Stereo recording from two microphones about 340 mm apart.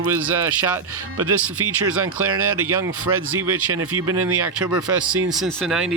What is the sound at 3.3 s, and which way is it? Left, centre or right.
Speech, right.